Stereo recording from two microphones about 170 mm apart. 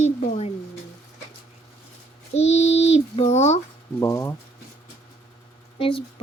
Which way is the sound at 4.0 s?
15° left (ahead or behind).